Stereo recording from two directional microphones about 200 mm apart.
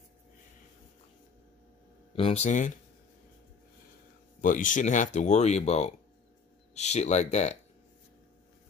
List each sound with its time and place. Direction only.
2.1 s speech: 30° left (ahead or behind)
4.4 s speech: 40° left (ahead or behind)